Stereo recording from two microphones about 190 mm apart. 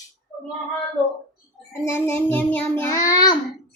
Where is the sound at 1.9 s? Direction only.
15° left (ahead or behind).